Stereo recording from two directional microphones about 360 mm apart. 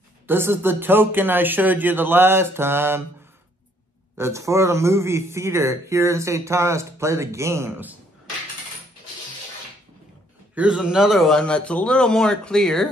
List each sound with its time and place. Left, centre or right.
0.3 s speech: centre
4.2 s a man's voice: centre
10.5 s speech: centre